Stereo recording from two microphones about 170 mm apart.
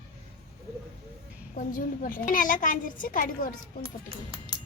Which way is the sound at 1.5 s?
55° left (ahead or behind).